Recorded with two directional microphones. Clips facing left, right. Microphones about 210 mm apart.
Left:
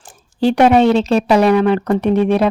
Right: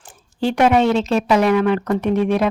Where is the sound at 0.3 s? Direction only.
35° left (ahead or behind).